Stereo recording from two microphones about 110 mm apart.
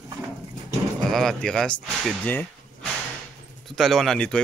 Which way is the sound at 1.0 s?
5° left (ahead or behind).